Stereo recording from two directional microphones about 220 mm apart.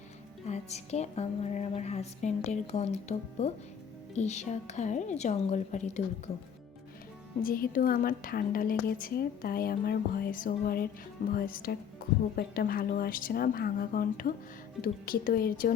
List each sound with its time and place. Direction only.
0.4 s a woman's voice: 30° left (ahead or behind)
7.4 s a woman's voice: 40° left (ahead or behind)